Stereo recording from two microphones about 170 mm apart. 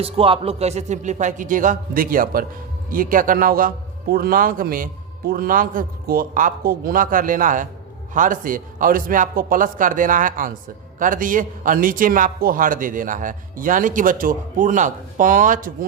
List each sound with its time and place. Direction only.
0.0 s a man's voice: 35° right (ahead or behind); by 15.9 s 50° right (ahead or behind)